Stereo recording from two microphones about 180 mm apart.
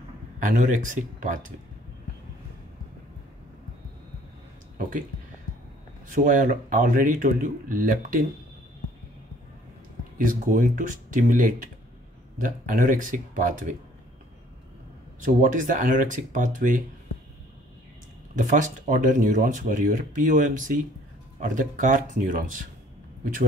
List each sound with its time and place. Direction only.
0.4 s speech: 45° right (ahead or behind)
4.7 s speech: 50° right (ahead or behind)
6.1 s speech: 45° right (ahead or behind)
10.1 s speech: 45° right (ahead or behind)
15.2 s speech: 45° right (ahead or behind)
18.3 s speech: 45° right (ahead or behind)